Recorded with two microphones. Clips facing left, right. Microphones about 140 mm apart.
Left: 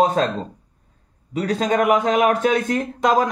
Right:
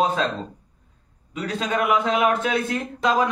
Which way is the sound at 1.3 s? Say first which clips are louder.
Left 5 dB; 40° left (ahead or behind).